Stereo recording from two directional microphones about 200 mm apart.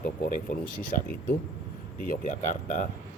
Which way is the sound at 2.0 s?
40° left (ahead or behind).